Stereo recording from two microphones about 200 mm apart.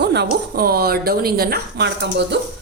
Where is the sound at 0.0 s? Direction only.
55° right (ahead or behind).